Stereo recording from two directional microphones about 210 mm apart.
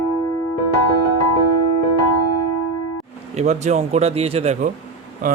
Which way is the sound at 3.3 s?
35° right (ahead or behind).